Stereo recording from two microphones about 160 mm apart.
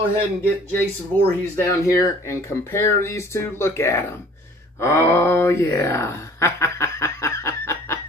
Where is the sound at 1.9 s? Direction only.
15° left (ahead or behind).